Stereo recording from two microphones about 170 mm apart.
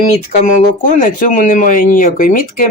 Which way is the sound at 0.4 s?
50° left (ahead or behind).